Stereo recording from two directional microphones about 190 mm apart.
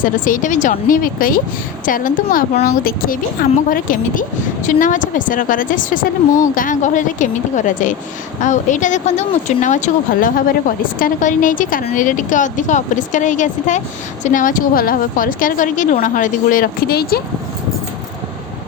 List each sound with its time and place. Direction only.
0.0 s a woman's voice: 45° left (ahead or behind)